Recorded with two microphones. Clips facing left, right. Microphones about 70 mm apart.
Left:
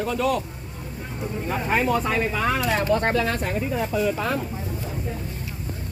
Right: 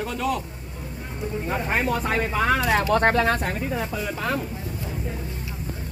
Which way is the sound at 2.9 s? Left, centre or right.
Right.